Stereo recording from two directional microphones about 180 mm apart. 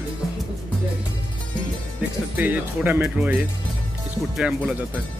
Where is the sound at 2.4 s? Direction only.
10° right (ahead or behind).